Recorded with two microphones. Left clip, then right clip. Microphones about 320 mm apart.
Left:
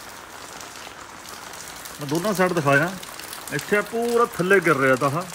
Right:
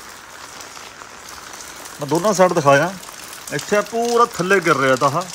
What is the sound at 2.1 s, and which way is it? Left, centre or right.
Speech, centre.